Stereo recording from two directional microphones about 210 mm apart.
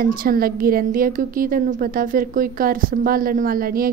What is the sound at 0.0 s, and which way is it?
Speech, 45° right (ahead or behind).